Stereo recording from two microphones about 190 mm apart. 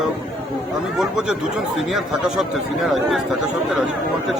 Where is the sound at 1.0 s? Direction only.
5° right (ahead or behind).